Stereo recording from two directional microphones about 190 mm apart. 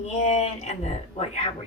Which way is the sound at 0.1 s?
35° left (ahead or behind).